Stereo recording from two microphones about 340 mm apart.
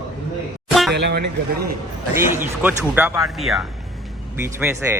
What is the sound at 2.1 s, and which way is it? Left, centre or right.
A man's voice, centre.